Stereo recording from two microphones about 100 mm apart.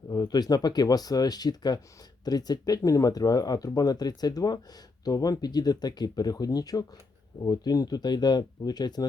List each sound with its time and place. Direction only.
0.1 s speech: 40° left (ahead or behind)